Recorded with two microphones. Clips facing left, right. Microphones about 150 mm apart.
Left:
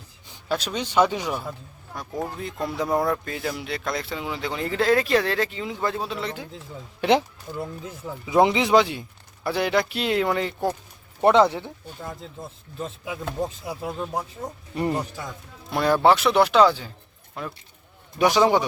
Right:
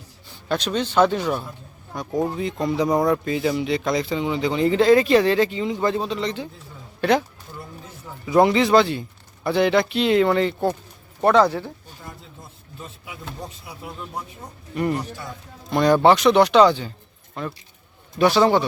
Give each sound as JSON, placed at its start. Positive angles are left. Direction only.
{"t": 0.3, "sound": "a man's voice", "side_deg": 5}
{"t": 1.9, "sound": "speech", "side_deg": 0}
{"t": 7.0, "sound": "speech", "side_deg": 25}
{"t": 8.4, "sound": "speech", "side_deg": 15}
{"t": 11.2, "sound": "speech", "side_deg": 20}
{"t": 13.7, "sound": "speech", "side_deg": 90}
{"t": 14.8, "sound": "speech", "side_deg": 30}
{"t": 15.7, "sound": "speech", "side_deg": 5}